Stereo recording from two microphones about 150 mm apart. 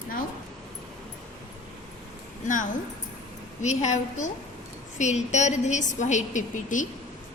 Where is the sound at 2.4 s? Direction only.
55° left (ahead or behind).